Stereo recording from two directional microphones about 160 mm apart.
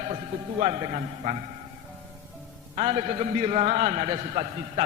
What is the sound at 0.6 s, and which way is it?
Speech, 40° right (ahead or behind).